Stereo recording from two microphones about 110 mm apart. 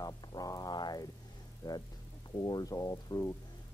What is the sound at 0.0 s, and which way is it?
Music, 35° left (ahead or behind).